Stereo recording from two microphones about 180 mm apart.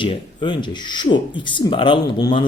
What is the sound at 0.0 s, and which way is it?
Speech, 25° left (ahead or behind).